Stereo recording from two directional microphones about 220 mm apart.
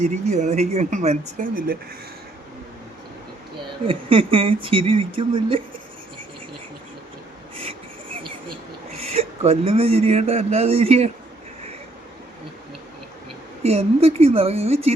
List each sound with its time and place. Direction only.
0.0 s speech: 30° right (ahead or behind)
3.8 s a man's voice: 25° right (ahead or behind)
9.0 s a man's voice: 30° right (ahead or behind)
13.6 s a man's voice: 30° right (ahead or behind)